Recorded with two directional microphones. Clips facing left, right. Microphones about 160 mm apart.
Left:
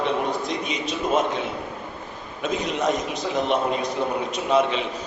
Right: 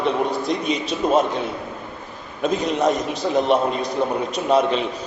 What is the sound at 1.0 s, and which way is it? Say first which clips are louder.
Speech: right 5 dB; 35° right (ahead or behind).